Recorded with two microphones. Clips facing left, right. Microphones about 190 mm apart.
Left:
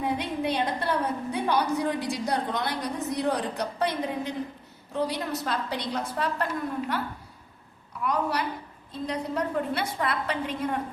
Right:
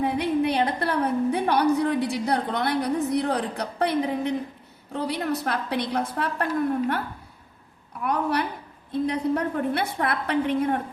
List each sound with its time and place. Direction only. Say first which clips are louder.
0.0 s a woman's voice: right 5 dB; 65° right (ahead or behind)
8.0 s a woman's voice: right 2 dB; 60° right (ahead or behind)